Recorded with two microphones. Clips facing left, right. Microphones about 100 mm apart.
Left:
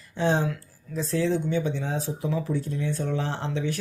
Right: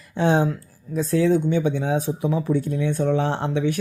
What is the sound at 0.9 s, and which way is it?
Speech, 55° right (ahead or behind).